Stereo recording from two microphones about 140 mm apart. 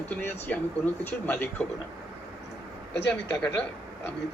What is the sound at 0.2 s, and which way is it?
Speech, 15° left (ahead or behind).